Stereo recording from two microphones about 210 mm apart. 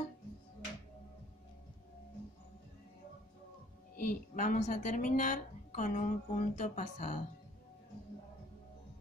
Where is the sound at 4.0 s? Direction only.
35° left (ahead or behind).